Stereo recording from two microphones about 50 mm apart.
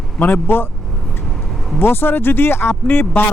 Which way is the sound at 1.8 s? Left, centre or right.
Left.